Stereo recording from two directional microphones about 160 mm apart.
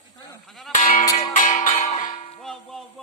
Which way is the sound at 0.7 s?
50° left (ahead or behind).